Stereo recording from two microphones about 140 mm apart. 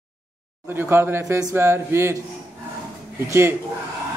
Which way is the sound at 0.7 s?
15° right (ahead or behind).